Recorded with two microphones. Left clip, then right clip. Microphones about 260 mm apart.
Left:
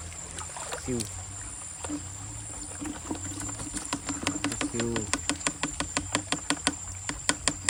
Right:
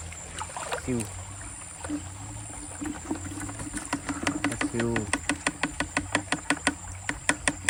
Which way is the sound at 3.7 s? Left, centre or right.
Centre.